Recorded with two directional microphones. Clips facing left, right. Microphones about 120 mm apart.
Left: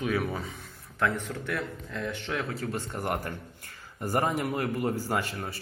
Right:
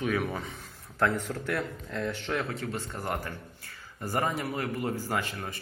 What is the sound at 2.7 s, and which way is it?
A man's voice, 15° left (ahead or behind).